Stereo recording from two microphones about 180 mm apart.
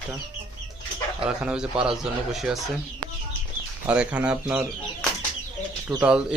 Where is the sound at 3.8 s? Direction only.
5° right (ahead or behind).